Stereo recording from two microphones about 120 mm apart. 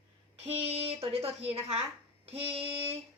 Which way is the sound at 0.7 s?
55° right (ahead or behind).